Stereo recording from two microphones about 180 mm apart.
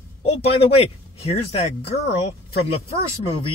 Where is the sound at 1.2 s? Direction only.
35° left (ahead or behind).